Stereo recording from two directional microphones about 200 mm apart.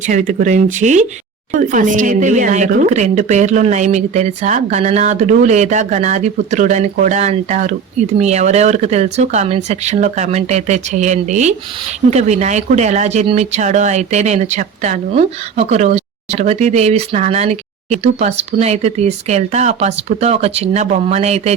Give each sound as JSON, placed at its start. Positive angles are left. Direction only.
{"t": 0.1, "sound": "speech", "side_deg": -40}